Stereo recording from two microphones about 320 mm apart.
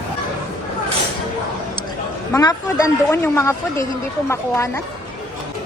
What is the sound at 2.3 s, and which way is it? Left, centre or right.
Speech, centre.